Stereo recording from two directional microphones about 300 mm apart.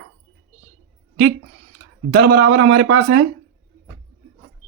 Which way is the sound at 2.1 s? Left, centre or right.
Right.